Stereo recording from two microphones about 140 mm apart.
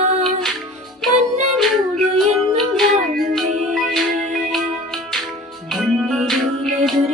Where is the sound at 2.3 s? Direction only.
Centre (ahead or behind).